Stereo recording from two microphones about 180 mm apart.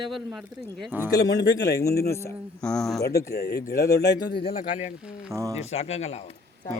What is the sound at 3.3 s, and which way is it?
Speech, 60° left (ahead or behind).